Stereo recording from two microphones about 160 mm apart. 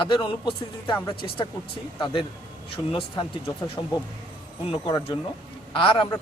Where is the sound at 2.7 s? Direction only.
35° left (ahead or behind).